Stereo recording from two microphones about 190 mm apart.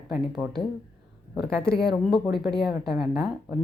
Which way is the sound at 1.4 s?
55° left (ahead or behind).